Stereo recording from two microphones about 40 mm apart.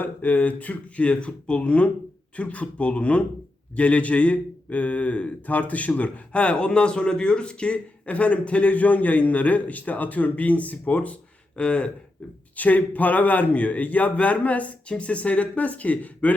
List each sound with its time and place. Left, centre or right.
0.0 s speech: left
12.5 s speech: left